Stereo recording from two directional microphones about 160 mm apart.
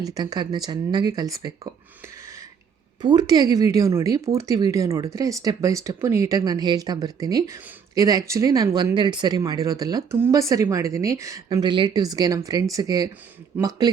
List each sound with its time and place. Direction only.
0.0 s speech: 25° right (ahead or behind)
3.0 s speech: 25° right (ahead or behind)